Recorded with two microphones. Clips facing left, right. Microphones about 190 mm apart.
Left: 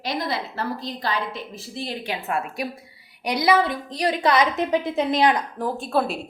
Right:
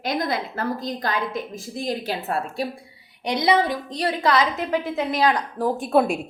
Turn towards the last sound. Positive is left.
turn(degrees=-15)  # may be behind; listen again after turning